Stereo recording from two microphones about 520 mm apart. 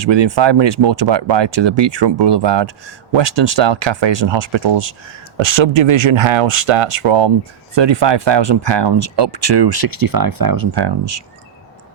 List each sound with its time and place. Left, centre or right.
0.0 s speech: right